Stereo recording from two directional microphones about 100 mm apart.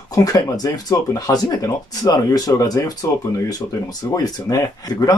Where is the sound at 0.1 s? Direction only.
40° left (ahead or behind).